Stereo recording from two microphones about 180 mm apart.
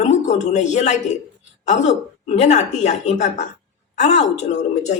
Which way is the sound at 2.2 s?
40° left (ahead or behind).